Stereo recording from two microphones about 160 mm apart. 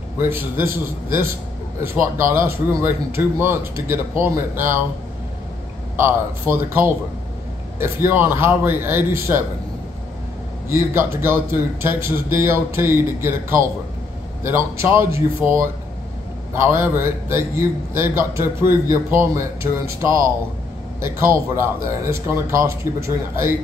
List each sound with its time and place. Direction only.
0.2 s a man's voice: 15° right (ahead or behind)
5.9 s a man's voice: 15° right (ahead or behind)
10.7 s a man's voice: 15° right (ahead or behind)